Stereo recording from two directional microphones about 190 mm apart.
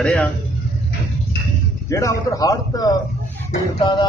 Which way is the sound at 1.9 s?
15° left (ahead or behind).